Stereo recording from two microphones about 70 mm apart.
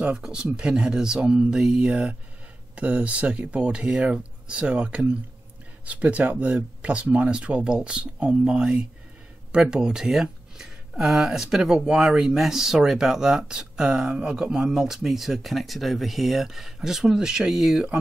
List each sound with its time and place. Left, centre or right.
0.1 s speech: centre